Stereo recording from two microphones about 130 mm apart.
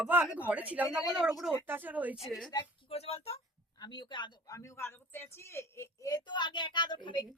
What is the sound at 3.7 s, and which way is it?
Speech, 35° left (ahead or behind).